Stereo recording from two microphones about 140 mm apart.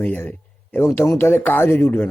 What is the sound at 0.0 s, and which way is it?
Speech, 15° left (ahead or behind).